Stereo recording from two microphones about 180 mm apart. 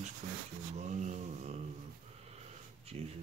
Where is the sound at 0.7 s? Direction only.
40° right (ahead or behind).